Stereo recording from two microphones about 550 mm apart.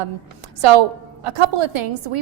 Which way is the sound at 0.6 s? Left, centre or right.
Right.